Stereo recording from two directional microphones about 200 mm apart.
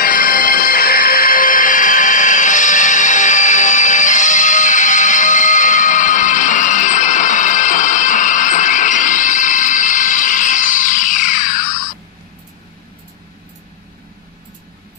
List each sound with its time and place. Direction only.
0.0 s music: 45° left (ahead or behind)